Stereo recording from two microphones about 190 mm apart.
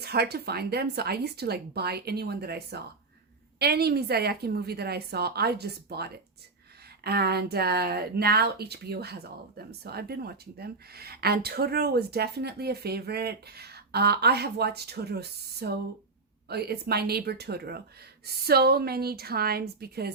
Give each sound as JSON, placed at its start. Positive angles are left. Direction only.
{"t": 0.0, "sound": "speech", "side_deg": -60}